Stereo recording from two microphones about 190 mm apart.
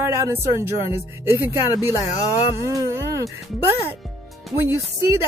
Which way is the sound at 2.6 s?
15° right (ahead or behind).